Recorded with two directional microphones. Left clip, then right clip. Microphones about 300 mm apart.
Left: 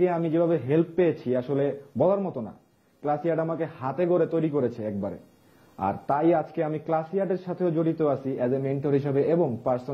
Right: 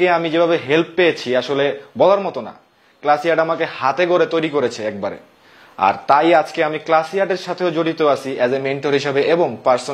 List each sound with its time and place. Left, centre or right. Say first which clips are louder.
0.0 s a man's voice: right 9 dB; centre
9.4 s a man's voice: right 10 dB; centre